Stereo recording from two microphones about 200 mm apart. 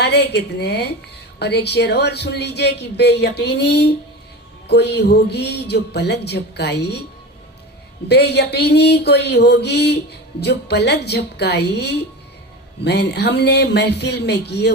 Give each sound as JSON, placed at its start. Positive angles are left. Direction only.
{"t": 0.0, "sound": "mantra", "side_deg": 55}
{"t": 8.0, "sound": "mantra", "side_deg": 55}